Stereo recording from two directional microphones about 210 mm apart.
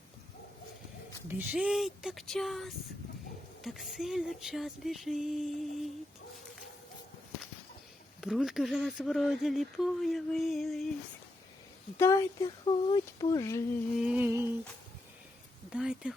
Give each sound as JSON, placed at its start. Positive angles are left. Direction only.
{"t": 1.3, "sound": "speech", "side_deg": -10}
{"t": 8.2, "sound": "speech", "side_deg": 0}
{"t": 11.9, "sound": "speech", "side_deg": 15}
{"t": 14.0, "sound": "a sound", "side_deg": -5}
{"t": 15.7, "sound": "speech", "side_deg": -5}